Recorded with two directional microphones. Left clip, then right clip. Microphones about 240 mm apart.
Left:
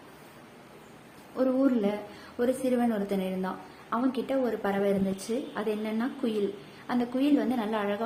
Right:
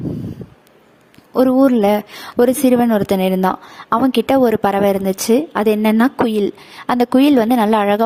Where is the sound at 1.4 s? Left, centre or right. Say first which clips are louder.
Right 14 dB; right.